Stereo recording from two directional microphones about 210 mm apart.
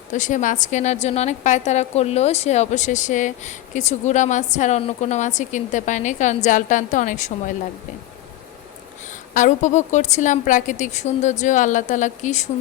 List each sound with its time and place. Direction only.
0.1 s a woman's voice: 35° left (ahead or behind)
9.3 s a woman's voice: 35° left (ahead or behind)